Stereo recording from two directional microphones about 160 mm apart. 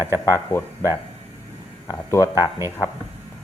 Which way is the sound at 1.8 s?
20° left (ahead or behind).